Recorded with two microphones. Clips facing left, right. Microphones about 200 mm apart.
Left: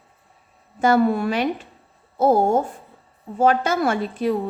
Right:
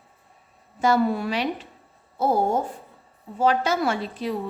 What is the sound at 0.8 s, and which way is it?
A woman's voice, 50° left (ahead or behind).